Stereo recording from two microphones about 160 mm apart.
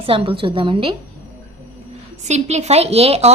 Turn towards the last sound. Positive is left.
turn(degrees=-40)  # may be behind; listen again after turning